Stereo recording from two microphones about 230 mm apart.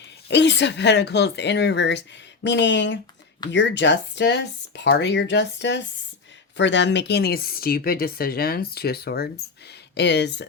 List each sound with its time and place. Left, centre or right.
0.3 s speech: left